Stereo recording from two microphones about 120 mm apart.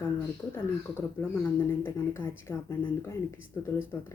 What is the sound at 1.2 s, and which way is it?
Speech, 15° left (ahead or behind).